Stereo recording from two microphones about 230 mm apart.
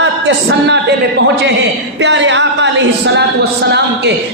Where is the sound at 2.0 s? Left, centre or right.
Right.